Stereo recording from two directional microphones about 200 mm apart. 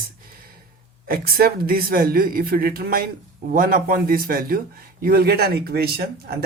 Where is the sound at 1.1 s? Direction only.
50° right (ahead or behind).